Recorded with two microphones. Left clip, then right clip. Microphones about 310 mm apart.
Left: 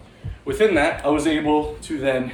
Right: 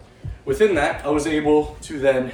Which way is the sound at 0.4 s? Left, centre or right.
Centre.